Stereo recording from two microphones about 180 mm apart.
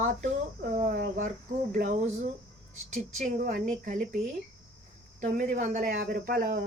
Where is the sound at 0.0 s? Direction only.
45° right (ahead or behind).